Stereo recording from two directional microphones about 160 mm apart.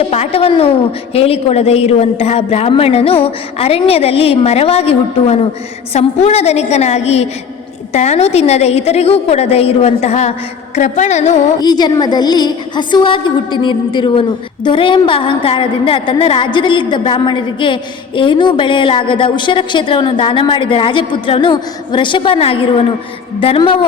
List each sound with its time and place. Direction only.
0.1 s a woman's voice: 40° left (ahead or behind)
10.8 s music: 50° left (ahead or behind)
11.6 s a woman's voice: 25° left (ahead or behind)